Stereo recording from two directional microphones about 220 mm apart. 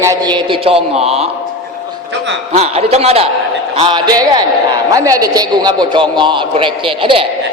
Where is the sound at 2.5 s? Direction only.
30° right (ahead or behind).